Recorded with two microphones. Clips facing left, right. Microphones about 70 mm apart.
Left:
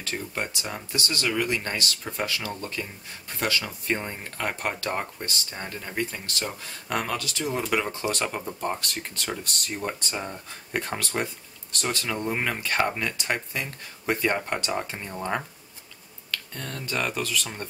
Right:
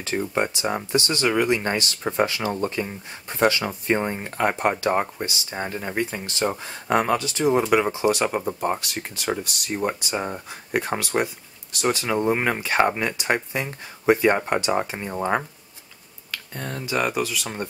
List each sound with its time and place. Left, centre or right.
0.0 s speech: right